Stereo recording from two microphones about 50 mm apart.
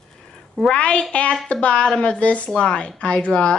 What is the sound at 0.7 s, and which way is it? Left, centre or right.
A woman's voice, centre.